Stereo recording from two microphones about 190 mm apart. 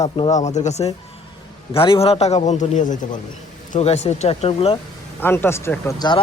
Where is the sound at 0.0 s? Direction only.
35° left (ahead or behind).